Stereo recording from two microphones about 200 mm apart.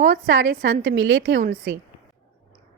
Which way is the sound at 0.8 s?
75° right (ahead or behind).